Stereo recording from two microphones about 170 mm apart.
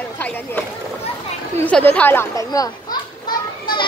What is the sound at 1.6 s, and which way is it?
Speech, 5° left (ahead or behind).